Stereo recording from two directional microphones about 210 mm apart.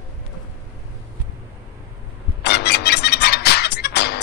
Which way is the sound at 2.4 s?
50° left (ahead or behind).